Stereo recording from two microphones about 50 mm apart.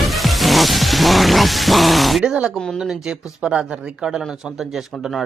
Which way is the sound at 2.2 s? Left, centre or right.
Centre.